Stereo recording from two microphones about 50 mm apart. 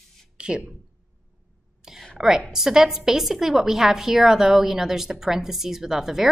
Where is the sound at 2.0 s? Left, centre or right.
Centre.